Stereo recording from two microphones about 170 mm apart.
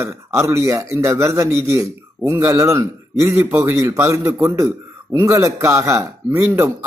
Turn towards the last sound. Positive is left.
turn(degrees=-15)  # may be behind; listen again after turning